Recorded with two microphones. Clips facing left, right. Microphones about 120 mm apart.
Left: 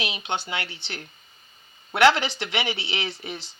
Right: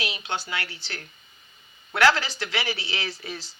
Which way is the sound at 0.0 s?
20° left (ahead or behind).